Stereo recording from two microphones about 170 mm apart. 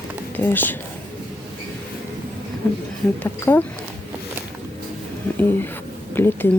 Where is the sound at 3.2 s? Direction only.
10° left (ahead or behind).